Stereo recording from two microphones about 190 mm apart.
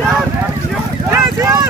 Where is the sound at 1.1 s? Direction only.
15° right (ahead or behind).